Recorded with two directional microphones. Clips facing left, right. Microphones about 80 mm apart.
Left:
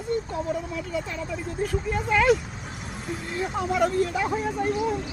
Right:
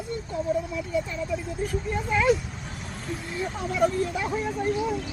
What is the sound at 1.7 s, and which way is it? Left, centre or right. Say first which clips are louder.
Speech: left 2 dB; left.